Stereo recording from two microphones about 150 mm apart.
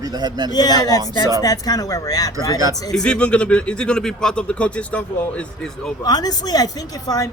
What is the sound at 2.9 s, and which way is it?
Speech, 5° left (ahead or behind).